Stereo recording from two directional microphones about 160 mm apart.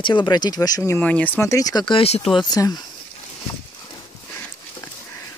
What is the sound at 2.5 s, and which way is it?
Speech, 25° left (ahead or behind).